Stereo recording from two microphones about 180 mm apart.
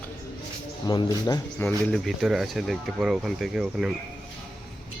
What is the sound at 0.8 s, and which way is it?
Speech, 25° left (ahead or behind).